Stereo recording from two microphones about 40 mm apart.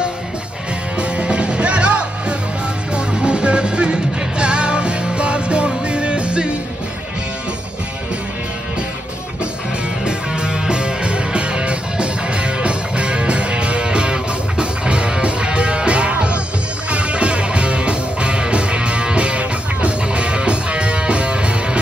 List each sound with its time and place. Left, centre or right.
0.9 s music: right
10.0 s music: right